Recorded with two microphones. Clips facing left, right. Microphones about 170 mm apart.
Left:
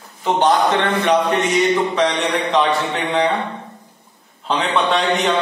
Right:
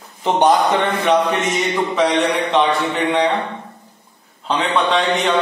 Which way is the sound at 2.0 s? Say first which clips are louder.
Right 2 dB; centre (ahead or behind).